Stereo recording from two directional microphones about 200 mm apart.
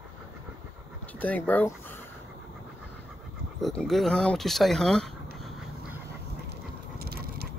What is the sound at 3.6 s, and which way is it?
Speech, centre (ahead or behind).